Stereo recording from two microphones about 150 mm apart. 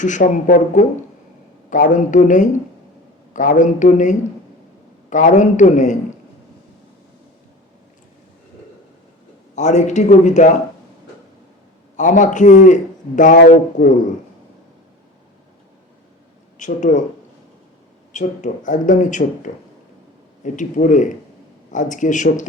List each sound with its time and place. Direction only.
0.0 s a man's voice: 55° left (ahead or behind)
9.6 s speech: 50° left (ahead or behind)
11.9 s a man's voice: 55° left (ahead or behind)
16.6 s speech: 55° left (ahead or behind)
18.1 s a man's voice: 55° left (ahead or behind)